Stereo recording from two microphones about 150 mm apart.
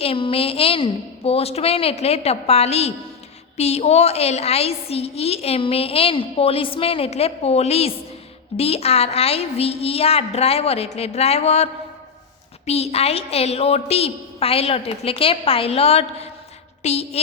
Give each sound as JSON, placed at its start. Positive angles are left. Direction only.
{"t": 0.0, "sound": "a woman's voice", "side_deg": 40}